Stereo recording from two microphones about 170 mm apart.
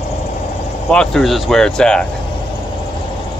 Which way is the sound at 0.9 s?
5° left (ahead or behind).